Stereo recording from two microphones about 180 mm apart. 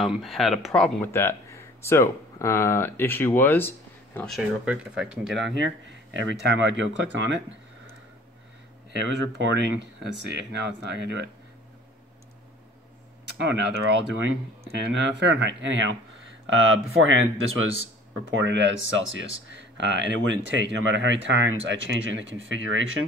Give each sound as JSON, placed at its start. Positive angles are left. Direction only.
{"t": 0.0, "sound": "speech", "side_deg": 0}
{"t": 4.4, "sound": "speech", "side_deg": -5}
{"t": 5.6, "sound": "speech", "side_deg": -90}
{"t": 6.4, "sound": "speech", "side_deg": -75}
{"t": 9.0, "sound": "speech", "side_deg": -80}
{"t": 13.2, "sound": "speech", "side_deg": -85}